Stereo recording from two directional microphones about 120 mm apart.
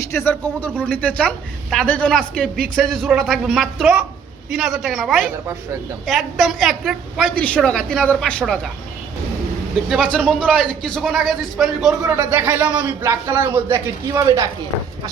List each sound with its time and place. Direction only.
0.0 s a man's voice: 20° left (ahead or behind); by 7.3 s centre (ahead or behind)
7.3 s a man's voice: 10° left (ahead or behind)
9.9 s a man's voice: 5° left (ahead or behind)
12.1 s a man's voice: 15° right (ahead or behind)